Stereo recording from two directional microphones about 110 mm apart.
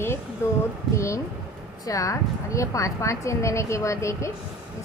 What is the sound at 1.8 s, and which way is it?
A woman's voice, 30° left (ahead or behind).